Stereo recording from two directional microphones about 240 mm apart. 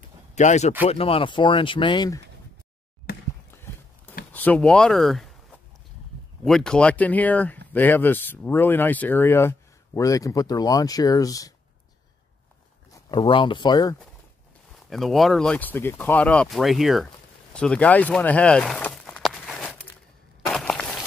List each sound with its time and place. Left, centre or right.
0.4 s speech: left
4.3 s speech: centre
6.4 s speech: centre
13.1 s speech: centre
14.9 s speech: centre
17.6 s a sound: centre